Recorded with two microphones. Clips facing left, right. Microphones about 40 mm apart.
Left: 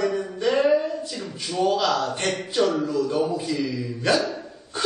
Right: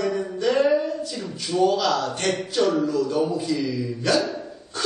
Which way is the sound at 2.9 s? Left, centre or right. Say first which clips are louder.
Right 1 dB; left.